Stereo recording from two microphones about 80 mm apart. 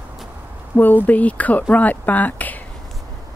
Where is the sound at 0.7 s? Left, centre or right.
Left.